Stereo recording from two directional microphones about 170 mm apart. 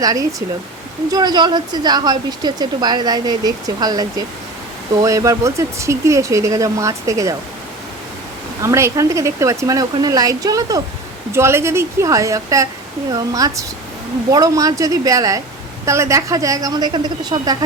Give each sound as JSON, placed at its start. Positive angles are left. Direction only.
{"t": 0.0, "sound": "speech", "side_deg": -20}
{"t": 5.0, "sound": "speech", "side_deg": -20}
{"t": 8.6, "sound": "a woman's voice", "side_deg": -15}